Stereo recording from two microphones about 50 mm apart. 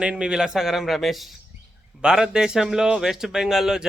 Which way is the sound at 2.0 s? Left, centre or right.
Centre.